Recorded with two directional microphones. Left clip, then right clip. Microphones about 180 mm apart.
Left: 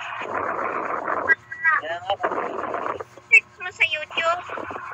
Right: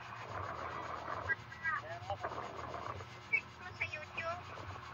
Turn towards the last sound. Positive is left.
turn(degrees=55)  # may be behind; listen again after turning